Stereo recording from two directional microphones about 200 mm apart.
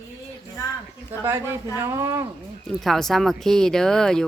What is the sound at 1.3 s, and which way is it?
Speech, 10° right (ahead or behind).